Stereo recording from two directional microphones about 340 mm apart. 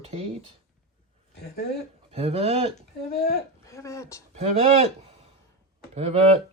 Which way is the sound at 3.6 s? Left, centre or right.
Centre.